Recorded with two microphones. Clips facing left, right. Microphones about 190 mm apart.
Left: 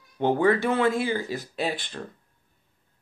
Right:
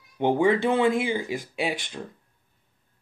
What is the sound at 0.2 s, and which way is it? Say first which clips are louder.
A man's voice: right 1 dB; 15° right (ahead or behind).